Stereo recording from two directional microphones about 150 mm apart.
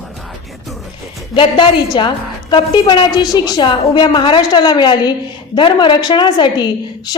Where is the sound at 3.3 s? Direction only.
30° left (ahead or behind).